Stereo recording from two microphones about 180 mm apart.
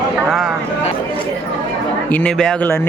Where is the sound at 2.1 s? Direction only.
5° left (ahead or behind).